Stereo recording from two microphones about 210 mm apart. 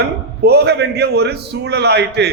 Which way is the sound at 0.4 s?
50° right (ahead or behind).